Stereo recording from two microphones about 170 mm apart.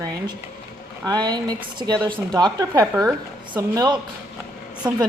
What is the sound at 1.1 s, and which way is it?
Speech, 25° right (ahead or behind).